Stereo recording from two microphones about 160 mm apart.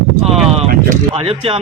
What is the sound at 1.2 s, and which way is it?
Speech, 35° right (ahead or behind).